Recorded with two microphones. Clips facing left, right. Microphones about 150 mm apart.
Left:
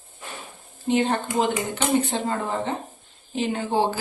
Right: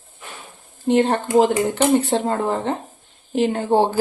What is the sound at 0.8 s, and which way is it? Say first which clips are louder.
Speech: right 5 dB; 65° right (ahead or behind).